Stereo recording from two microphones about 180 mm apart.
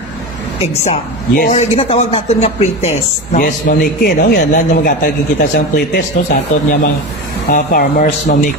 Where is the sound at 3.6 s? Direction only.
60° left (ahead or behind).